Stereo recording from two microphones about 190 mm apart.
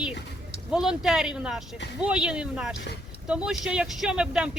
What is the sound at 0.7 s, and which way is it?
Speech, 5° right (ahead or behind).